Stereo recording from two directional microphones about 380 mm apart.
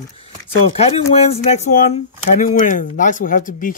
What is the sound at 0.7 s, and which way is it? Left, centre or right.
Speech, centre.